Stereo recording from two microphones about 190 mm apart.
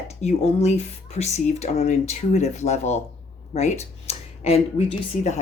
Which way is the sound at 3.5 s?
35° left (ahead or behind).